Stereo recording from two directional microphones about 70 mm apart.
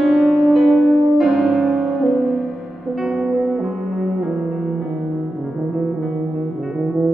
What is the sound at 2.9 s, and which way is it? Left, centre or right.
Music, centre.